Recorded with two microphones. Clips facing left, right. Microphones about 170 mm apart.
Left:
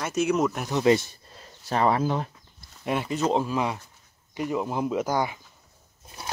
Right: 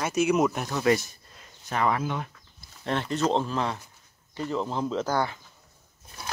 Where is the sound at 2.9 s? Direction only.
10° left (ahead or behind).